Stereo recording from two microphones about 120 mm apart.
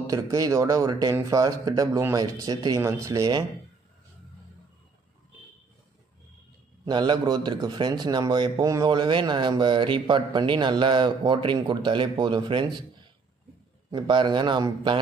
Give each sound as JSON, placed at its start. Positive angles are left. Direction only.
{"t": 0.0, "sound": "speech", "side_deg": -30}
{"t": 6.9, "sound": "speech", "side_deg": -40}
{"t": 13.8, "sound": "speech", "side_deg": -40}